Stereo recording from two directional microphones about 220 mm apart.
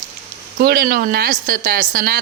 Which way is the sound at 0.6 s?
40° right (ahead or behind).